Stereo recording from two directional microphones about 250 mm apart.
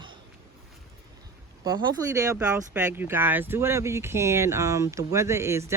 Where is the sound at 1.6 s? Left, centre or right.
Centre.